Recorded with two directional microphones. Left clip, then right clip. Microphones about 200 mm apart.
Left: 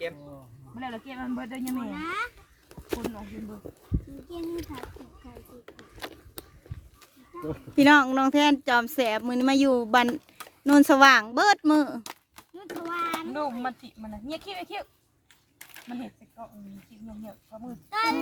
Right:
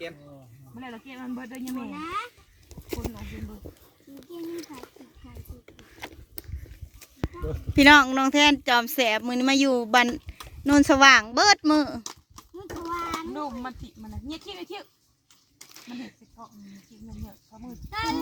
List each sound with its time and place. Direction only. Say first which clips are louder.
0.8 s speech: left 4 dB; centre (ahead or behind)
3.2 s speech: left 1 dB; 5° right (ahead or behind)
4.7 s speech: left 3 dB; centre (ahead or behind)
5.6 s a sound: left 1 dB; centre (ahead or behind)
7.8 s speech: right 3 dB; 5° right (ahead or behind)
12.5 s a sound: even; 20° left (ahead or behind)
14.6 s speech: left 3 dB; 20° left (ahead or behind)
15.9 s speech: left 2 dB; 10° right (ahead or behind)
17.9 s speech: left 3 dB; 25° left (ahead or behind)